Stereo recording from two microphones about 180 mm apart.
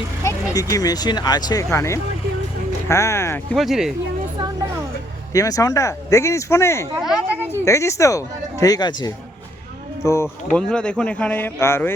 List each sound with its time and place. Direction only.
0.5 s speech: 20° left (ahead or behind)
3.5 s speech: centre (ahead or behind)
5.3 s speech: 20° left (ahead or behind)
7.0 s speech: 5° right (ahead or behind)
7.5 s speech: 15° left (ahead or behind)